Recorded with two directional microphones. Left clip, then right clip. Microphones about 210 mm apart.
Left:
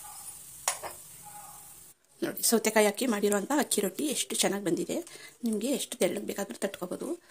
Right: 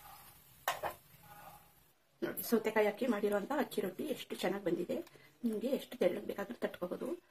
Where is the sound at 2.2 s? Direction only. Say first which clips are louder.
Left 7 dB; 45° left (ahead or behind).